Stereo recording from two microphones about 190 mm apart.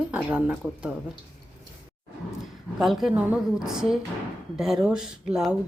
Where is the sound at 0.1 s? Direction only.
5° right (ahead or behind).